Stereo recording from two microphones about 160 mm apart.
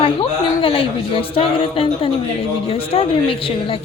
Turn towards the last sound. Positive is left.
turn(degrees=35)  # may be behind; listen again after turning